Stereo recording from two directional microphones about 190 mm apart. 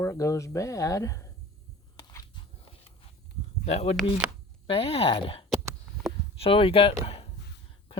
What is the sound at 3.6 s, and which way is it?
Speech, 35° left (ahead or behind).